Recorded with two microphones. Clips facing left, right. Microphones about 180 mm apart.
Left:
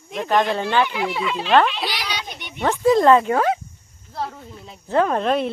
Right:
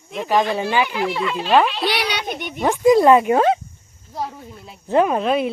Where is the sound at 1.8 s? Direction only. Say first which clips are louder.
Right 7 dB; 65° right (ahead or behind); by 2.6 s 45° right (ahead or behind).